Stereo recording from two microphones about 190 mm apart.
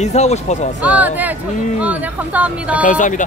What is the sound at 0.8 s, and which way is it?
Speech, 10° right (ahead or behind).